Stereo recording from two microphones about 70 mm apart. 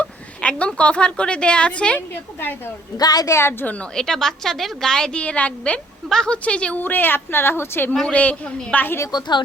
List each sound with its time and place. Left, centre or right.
0.0 s a woman's voice: centre
2.0 s a woman's voice: left
3.0 s a woman's voice: left
3.2 s a woman's voice: left
3.9 s a woman's voice: centre
6.8 s a woman's voice: left
8.1 s a man's voice: left
9.1 s speech: left